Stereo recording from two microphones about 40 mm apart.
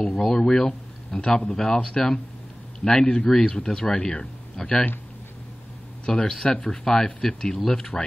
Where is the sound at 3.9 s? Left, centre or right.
Left.